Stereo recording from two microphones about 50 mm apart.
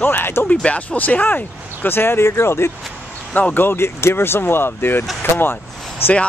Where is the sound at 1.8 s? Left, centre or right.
Left.